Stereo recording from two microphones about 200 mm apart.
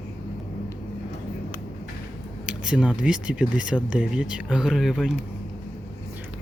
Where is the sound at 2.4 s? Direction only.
5° right (ahead or behind).